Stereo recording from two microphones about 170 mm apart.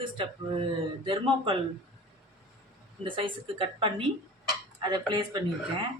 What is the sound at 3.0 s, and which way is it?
A woman's voice, 30° right (ahead or behind).